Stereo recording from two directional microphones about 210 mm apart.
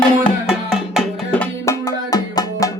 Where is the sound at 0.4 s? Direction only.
Centre (ahead or behind).